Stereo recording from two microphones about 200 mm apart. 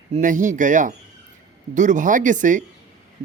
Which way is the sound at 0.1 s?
40° right (ahead or behind).